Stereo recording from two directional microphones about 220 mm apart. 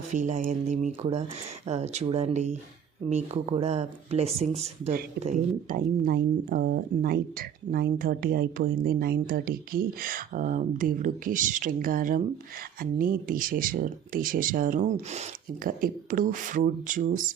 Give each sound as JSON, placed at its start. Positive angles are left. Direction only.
{"t": 0.1, "sound": "speech", "side_deg": -35}